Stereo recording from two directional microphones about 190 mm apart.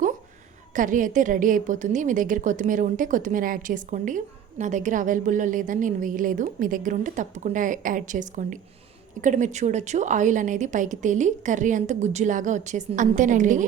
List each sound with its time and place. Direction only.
0.7 s a woman's voice: 45° right (ahead or behind)